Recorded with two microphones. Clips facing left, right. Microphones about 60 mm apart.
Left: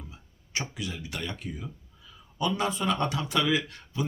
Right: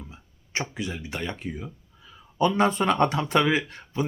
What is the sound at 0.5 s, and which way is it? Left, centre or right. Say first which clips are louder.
Speech: right 4 dB; right.